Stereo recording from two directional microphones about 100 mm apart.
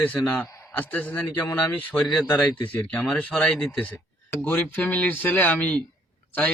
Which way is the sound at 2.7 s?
20° left (ahead or behind).